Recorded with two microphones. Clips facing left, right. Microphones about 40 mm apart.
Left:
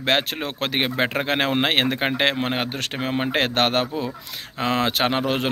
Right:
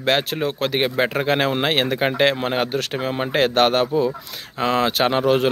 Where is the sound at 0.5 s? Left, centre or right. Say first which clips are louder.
Left 1 dB; left.